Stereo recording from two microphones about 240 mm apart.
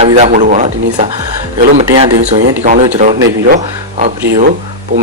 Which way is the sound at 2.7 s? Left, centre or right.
Right.